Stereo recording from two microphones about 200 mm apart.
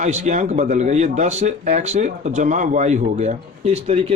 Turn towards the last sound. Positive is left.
turn(degrees=-30)  # may be behind; listen again after turning